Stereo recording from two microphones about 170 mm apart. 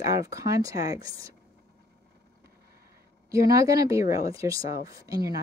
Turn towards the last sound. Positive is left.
turn(degrees=-20)  # may be behind; listen again after turning